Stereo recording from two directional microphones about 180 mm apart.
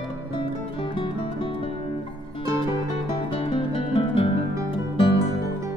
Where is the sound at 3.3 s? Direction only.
30° left (ahead or behind).